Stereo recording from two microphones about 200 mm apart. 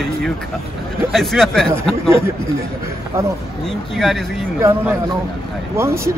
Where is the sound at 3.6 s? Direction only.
Centre (ahead or behind).